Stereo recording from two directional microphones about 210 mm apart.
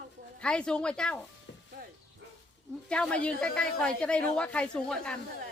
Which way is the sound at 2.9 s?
5° left (ahead or behind).